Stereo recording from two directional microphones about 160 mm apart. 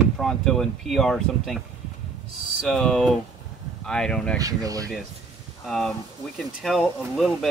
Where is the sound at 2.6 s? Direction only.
5° left (ahead or behind).